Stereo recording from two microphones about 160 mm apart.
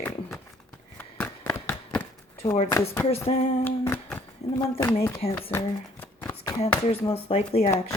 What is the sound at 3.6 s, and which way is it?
Humming, 15° left (ahead or behind).